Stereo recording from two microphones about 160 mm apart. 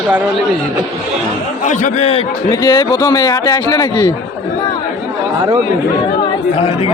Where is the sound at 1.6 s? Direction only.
50° left (ahead or behind).